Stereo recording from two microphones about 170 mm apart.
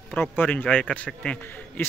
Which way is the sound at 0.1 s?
10° left (ahead or behind).